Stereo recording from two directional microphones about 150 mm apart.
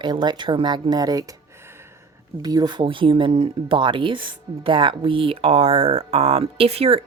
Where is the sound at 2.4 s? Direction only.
25° right (ahead or behind).